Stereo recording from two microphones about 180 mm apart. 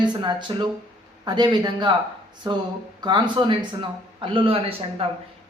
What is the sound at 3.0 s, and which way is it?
Speech, 25° right (ahead or behind).